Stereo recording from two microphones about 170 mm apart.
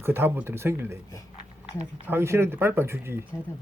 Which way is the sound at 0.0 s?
15° right (ahead or behind).